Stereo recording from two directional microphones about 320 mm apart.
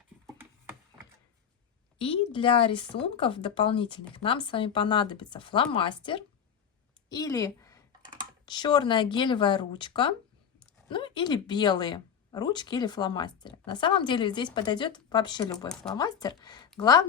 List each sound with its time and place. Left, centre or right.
2.0 s a woman's voice: centre
15.7 s a woman's voice: centre